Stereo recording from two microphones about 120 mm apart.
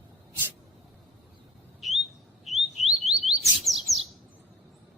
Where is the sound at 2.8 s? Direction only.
60° right (ahead or behind).